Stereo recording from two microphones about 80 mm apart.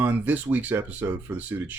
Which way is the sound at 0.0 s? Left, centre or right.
Right.